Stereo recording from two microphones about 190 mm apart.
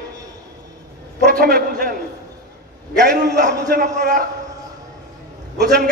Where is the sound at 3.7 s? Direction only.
55° right (ahead or behind).